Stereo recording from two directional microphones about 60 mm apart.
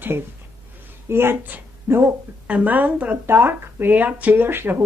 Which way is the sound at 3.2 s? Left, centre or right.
Right.